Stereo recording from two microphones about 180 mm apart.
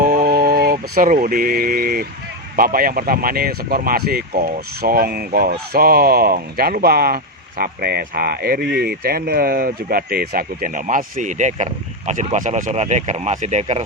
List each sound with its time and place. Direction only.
0.0 s mantra: 60° right (ahead or behind)
2.6 s speech: 55° right (ahead or behind); by 13.8 s 40° right (ahead or behind)